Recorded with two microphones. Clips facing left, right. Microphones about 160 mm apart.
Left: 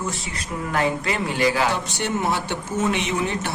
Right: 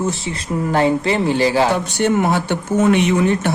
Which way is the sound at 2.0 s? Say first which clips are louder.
Right 8 dB; 55° right (ahead or behind).